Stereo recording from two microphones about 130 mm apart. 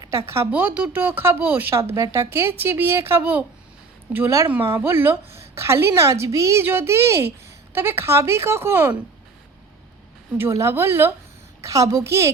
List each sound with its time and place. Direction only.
0.3 s a woman's voice: 15° right (ahead or behind)
10.3 s a woman's voice: 20° right (ahead or behind)